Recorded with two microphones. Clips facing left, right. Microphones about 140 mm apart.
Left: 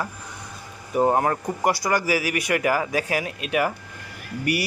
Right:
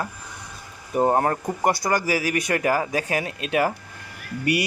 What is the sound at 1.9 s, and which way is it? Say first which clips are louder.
Speech: even; 45° right (ahead or behind).